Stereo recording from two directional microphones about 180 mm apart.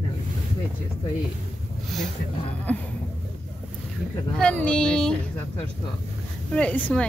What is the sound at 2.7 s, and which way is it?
Speech, 10° left (ahead or behind).